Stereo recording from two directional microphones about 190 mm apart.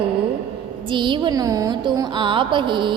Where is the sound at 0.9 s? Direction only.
25° right (ahead or behind).